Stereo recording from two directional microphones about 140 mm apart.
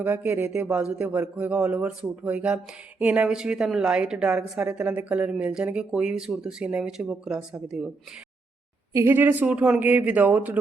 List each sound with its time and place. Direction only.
0.0 s a woman's voice: 15° right (ahead or behind)
8.9 s a woman's voice: 20° right (ahead or behind)